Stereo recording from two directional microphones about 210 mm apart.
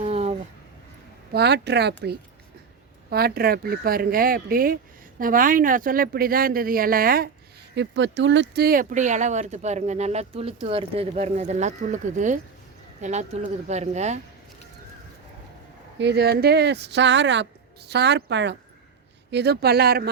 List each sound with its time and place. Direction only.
0.0 s a sound: 30° right (ahead or behind)
1.3 s speech: 50° right (ahead or behind)
7.8 s speech: 55° right (ahead or behind); by 14.2 s 35° right (ahead or behind)
16.0 s speech: 50° right (ahead or behind)